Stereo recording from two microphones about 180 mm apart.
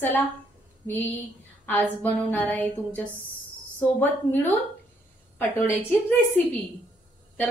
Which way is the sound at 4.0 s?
10° left (ahead or behind).